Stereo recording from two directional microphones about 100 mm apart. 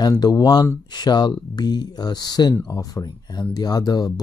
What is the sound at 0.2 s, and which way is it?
Speech, 45° left (ahead or behind).